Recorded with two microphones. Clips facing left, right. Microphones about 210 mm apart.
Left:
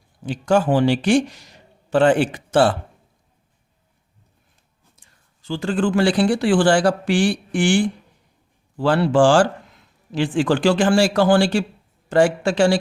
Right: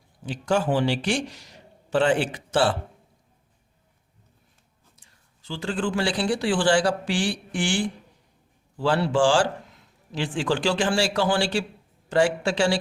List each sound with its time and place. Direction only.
0.3 s speech: 50° left (ahead or behind)
4.9 s speech: 50° left (ahead or behind)
8.8 s speech: 55° left (ahead or behind)